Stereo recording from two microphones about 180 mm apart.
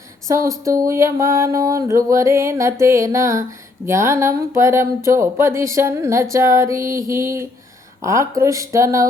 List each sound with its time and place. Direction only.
0.3 s mantra: 15° right (ahead or behind)